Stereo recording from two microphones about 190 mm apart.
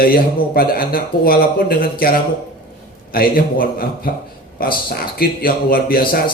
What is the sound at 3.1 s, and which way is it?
A man's voice, 50° left (ahead or behind).